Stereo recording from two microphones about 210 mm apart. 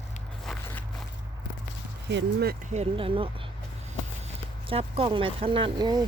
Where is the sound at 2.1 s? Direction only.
50° right (ahead or behind).